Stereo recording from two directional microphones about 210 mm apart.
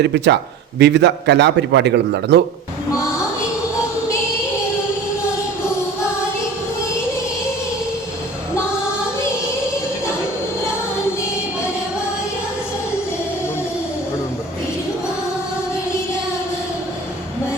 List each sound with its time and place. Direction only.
0.0 s a man's voice: 55° right (ahead or behind)